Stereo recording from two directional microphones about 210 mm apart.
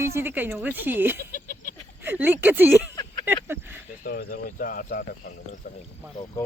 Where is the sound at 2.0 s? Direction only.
10° right (ahead or behind).